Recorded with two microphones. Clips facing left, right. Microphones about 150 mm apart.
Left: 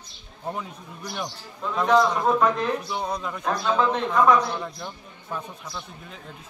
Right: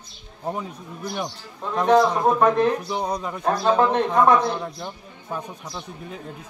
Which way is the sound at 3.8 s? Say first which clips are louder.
Right 4 dB; 50° right (ahead or behind).